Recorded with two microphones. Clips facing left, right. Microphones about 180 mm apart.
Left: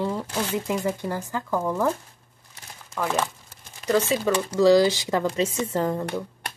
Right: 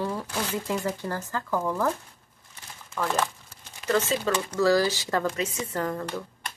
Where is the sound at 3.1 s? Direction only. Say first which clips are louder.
Left 1 dB; 15° left (ahead or behind).